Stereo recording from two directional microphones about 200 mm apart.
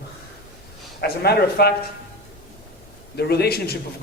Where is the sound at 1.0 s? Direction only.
50° left (ahead or behind).